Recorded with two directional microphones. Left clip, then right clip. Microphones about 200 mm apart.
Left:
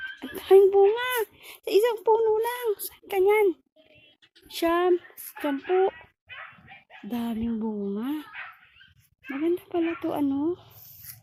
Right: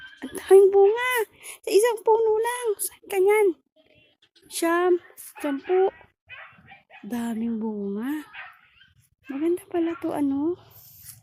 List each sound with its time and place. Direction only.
0.2 s speech: 10° right (ahead or behind)
6.2 s a sound: 55° left (ahead or behind)
7.1 s a woman's voice: 10° right (ahead or behind)
9.4 s a woman's voice: 5° right (ahead or behind)